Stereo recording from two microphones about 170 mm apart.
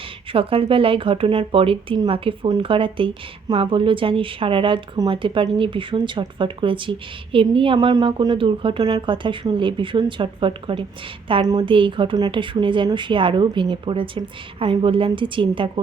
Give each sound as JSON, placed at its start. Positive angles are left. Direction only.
{"t": 0.3, "sound": "a woman's voice", "side_deg": -30}